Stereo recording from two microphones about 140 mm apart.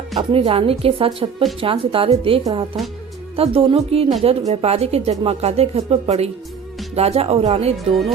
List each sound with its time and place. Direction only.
0.2 s speech: 40° right (ahead or behind)
2.4 s speech: 30° right (ahead or behind)
3.3 s speech: 45° right (ahead or behind)